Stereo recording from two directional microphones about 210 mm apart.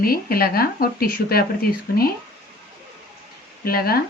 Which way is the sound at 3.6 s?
45° left (ahead or behind).